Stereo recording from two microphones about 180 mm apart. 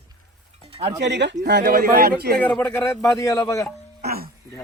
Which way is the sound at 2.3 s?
10° left (ahead or behind).